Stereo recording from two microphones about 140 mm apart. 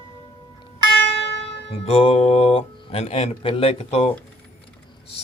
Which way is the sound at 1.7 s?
45° left (ahead or behind).